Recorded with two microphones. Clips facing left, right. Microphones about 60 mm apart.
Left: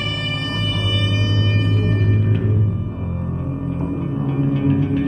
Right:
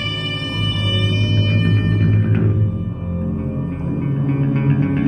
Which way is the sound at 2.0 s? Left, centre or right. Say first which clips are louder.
Right 2 dB; right.